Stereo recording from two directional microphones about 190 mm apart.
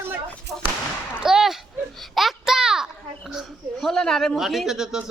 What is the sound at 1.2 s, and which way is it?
A child's voice, 5° right (ahead or behind).